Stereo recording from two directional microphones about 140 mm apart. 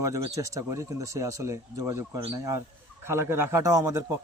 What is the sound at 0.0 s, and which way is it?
Speech, 25° right (ahead or behind).